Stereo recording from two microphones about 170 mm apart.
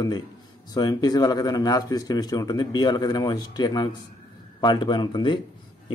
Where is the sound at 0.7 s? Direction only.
25° left (ahead or behind).